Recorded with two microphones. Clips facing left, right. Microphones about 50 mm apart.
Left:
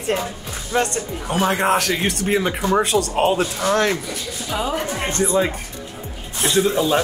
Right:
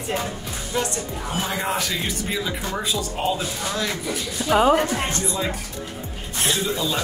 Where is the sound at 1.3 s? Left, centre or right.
Left.